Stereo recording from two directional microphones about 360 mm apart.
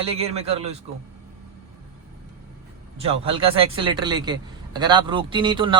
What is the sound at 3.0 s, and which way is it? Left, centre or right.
A man's voice, centre.